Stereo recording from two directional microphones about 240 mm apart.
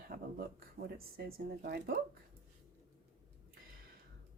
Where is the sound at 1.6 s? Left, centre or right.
Right.